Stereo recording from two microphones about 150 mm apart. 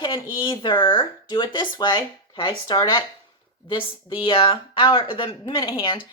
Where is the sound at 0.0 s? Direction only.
30° left (ahead or behind).